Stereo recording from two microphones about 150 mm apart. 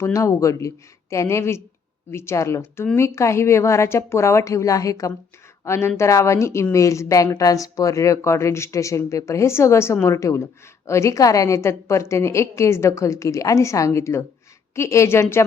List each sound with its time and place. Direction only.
0.0 s a woman's voice: 20° left (ahead or behind)